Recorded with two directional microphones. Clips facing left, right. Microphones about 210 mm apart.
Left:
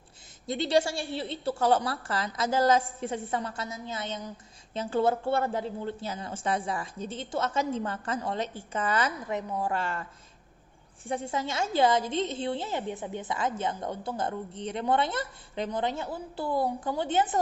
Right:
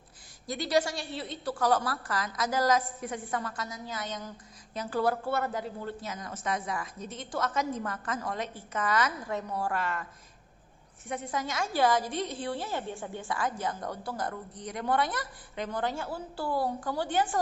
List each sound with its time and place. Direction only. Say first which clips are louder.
0.4 s a woman's voice: left 2 dB; 25° left (ahead or behind)
9.3 s a woman's voice: left 2 dB; 15° left (ahead or behind)